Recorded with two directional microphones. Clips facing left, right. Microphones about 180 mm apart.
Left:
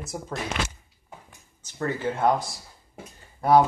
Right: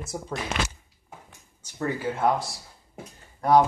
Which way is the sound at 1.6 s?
10° right (ahead or behind).